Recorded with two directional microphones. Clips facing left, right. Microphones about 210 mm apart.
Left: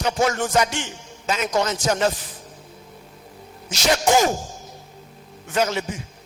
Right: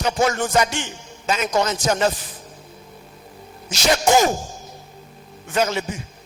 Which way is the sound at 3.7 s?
10° right (ahead or behind).